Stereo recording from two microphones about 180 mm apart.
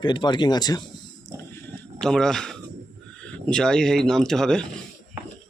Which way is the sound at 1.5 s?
5° left (ahead or behind).